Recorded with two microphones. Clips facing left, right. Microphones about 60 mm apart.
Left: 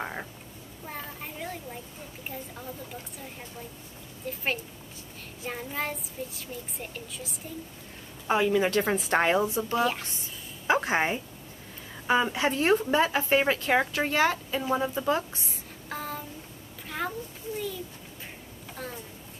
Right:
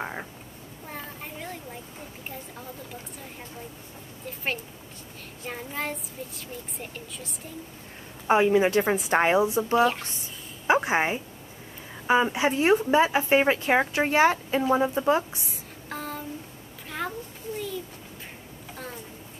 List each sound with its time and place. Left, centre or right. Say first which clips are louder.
0.0 s a sound: right 1 dB; centre
2.2 s a child's voice: left 2 dB; centre
5.4 s a child's voice: even; centre
8.3 s a woman's voice: right 4 dB; right
15.3 s music: right 1 dB; centre
17.0 s children playing: even; centre